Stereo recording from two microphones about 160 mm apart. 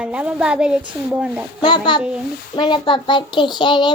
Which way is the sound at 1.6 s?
30° left (ahead or behind).